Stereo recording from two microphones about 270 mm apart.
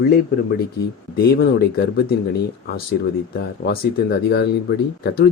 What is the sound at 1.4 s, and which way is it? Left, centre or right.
Speech, left.